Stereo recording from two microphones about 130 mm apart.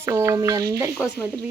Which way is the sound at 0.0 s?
20° right (ahead or behind).